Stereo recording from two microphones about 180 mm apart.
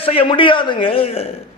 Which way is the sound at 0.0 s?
30° left (ahead or behind).